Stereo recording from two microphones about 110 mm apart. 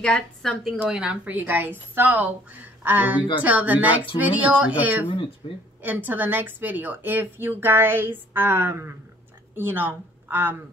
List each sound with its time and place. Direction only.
0.0 s a woman's voice: 10° left (ahead or behind)
0.8 s speech: 5° right (ahead or behind)
5.4 s speech: 50° left (ahead or behind)
5.8 s a woman's voice: 15° right (ahead or behind)